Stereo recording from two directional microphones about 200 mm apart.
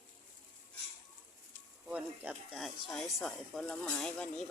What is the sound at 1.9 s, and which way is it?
Speech, 5° right (ahead or behind).